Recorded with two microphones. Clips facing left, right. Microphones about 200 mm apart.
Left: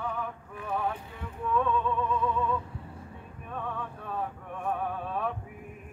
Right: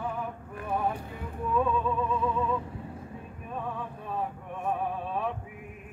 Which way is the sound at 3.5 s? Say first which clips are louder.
Right 1 dB; 5° right (ahead or behind).